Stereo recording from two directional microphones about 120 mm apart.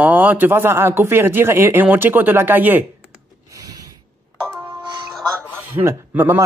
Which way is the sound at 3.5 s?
30° right (ahead or behind).